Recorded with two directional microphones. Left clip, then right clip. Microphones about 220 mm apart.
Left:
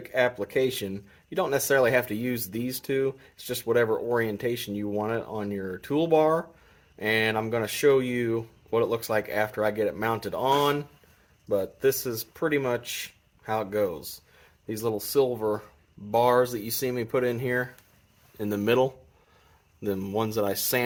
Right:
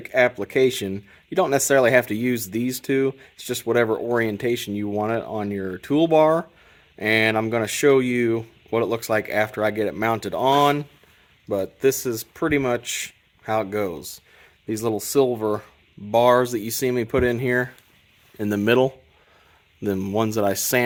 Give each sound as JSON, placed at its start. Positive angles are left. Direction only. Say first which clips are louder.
{"t": 0.0, "sound": "speech", "louder": "right 6 dB", "side_deg": -65}
{"t": 18.3, "sound": "speech", "louder": "right 5 dB", "side_deg": -45}